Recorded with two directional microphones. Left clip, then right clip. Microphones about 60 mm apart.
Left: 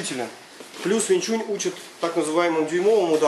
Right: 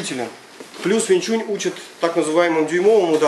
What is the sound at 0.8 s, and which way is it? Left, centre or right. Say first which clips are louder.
Speech: right 4 dB; centre.